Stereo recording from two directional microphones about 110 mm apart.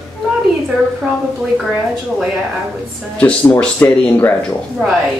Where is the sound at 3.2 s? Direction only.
15° left (ahead or behind).